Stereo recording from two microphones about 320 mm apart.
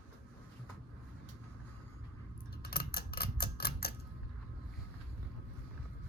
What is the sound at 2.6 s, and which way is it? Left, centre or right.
Typewriter, left.